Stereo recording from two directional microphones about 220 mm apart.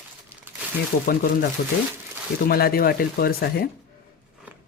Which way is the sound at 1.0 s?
40° left (ahead or behind).